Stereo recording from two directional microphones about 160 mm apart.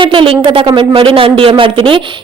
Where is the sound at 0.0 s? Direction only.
30° right (ahead or behind).